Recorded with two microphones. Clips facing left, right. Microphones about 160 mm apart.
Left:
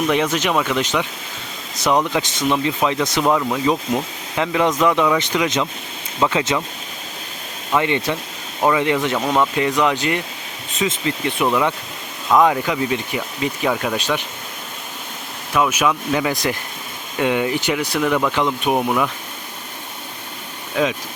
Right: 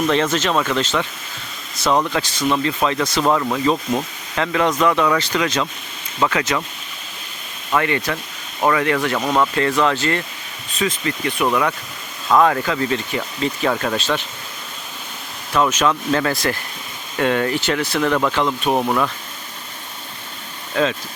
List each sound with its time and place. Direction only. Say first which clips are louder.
0.1 s speech: even; 10° left (ahead or behind)
3.2 s speech: even; 5° left (ahead or behind); by 6.6 s 25° left (ahead or behind)
7.7 s speech: left 1 dB; 20° left (ahead or behind)
15.5 s speech: right 1 dB; 10° left (ahead or behind)
20.8 s speech: even; 10° left (ahead or behind)